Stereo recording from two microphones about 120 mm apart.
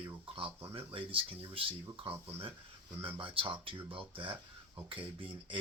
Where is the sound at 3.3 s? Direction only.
45° right (ahead or behind).